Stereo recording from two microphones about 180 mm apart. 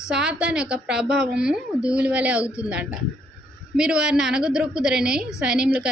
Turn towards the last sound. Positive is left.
turn(degrees=-5)  # may be behind; listen again after turning